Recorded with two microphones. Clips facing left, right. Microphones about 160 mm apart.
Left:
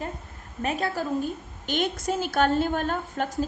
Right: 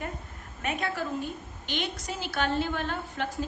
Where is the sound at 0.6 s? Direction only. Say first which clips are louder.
Left 4 dB; 35° left (ahead or behind).